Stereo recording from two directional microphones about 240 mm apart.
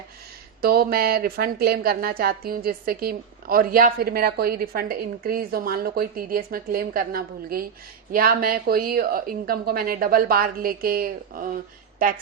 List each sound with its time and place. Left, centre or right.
0.6 s speech: right